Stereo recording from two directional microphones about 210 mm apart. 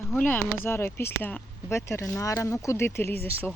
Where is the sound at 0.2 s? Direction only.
10° left (ahead or behind).